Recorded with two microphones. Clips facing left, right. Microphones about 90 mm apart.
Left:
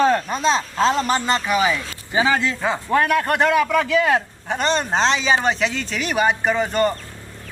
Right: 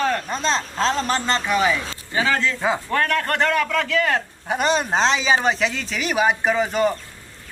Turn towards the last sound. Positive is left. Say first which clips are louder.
# even
turn(degrees=0)  # may be behind; listen again after turning